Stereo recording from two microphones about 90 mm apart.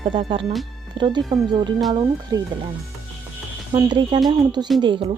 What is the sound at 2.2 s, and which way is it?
Speech, 50° right (ahead or behind).